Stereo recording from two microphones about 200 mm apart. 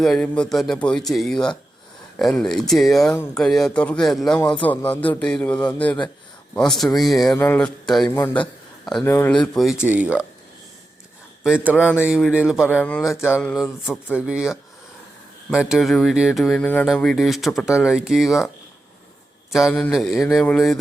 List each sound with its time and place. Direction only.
0.0 s speech: 5° left (ahead or behind)
4.4 s speech: 20° left (ahead or behind)
4.6 s a man's voice: 10° left (ahead or behind)
11.4 s speech: 5° right (ahead or behind)
12.8 s a man's voice: 5° left (ahead or behind)
13.5 s speech: centre (ahead or behind)
19.5 s speech: centre (ahead or behind)